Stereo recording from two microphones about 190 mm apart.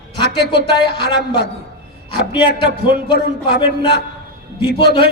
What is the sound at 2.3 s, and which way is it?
A man's voice, 25° left (ahead or behind).